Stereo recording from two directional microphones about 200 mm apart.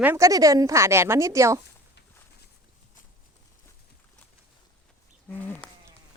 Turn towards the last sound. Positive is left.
turn(degrees=10)  # may be behind; listen again after turning